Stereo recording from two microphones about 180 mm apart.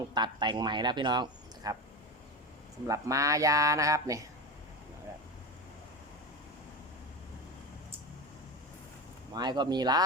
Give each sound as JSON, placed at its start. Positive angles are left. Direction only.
{"t": 0.1, "sound": "speech", "side_deg": -25}
{"t": 2.8, "sound": "speech", "side_deg": -20}
{"t": 9.3, "sound": "speech", "side_deg": -25}